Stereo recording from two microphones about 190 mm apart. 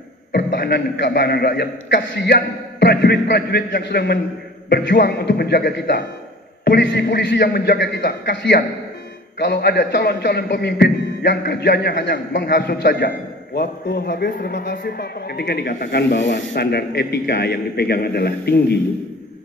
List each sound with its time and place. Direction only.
0.3 s a man's voice: 60° left (ahead or behind)
13.6 s a man's voice: 50° left (ahead or behind)
16.5 s a man's voice: 60° left (ahead or behind)